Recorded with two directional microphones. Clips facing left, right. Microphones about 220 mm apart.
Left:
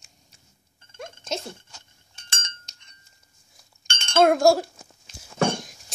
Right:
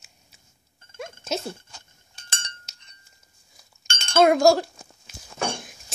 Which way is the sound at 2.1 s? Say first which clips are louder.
Right 1 dB; 35° right (ahead or behind).